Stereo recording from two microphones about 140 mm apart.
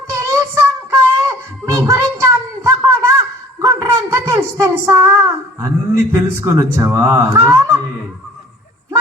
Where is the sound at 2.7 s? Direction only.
20° right (ahead or behind).